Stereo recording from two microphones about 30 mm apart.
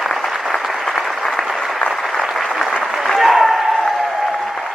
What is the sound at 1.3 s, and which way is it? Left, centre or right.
Applause, left.